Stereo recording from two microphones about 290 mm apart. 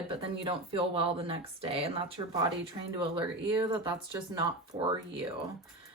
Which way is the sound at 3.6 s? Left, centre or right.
Centre.